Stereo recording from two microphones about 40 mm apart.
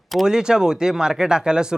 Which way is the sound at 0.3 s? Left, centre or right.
Centre.